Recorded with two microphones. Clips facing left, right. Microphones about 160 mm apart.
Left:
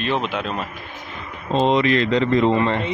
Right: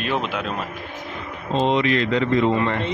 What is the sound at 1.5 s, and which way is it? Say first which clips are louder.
Speech: left 2 dB; 35° left (ahead or behind).